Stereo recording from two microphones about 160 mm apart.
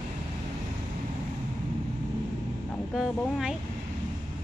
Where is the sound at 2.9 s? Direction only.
5° right (ahead or behind).